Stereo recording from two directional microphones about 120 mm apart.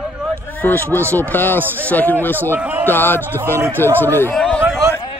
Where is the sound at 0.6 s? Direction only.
15° left (ahead or behind).